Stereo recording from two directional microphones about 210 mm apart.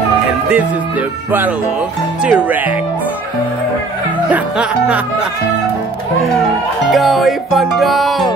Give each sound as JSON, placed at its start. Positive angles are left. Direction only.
{"t": 2.2, "sound": "speech", "side_deg": -5}
{"t": 4.3, "sound": "music", "side_deg": -5}
{"t": 6.9, "sound": "music", "side_deg": 0}